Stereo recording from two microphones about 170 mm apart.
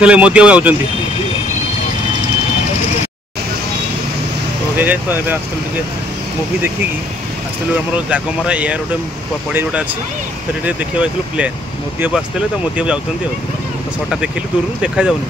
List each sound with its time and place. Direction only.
0.0 s speech: 5° right (ahead or behind)
4.7 s speech: 10° right (ahead or behind)
7.9 s speech: 5° right (ahead or behind)
14.8 s speech: 5° right (ahead or behind)